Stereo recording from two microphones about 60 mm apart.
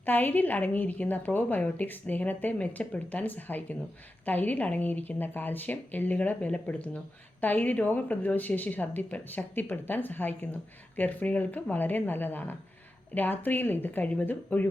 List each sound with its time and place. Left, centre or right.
0.0 s a woman's voice: left